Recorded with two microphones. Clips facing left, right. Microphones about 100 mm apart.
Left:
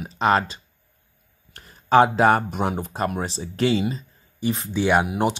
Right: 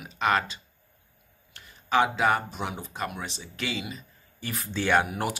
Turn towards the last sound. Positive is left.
turn(degrees=20)  # may be behind; listen again after turning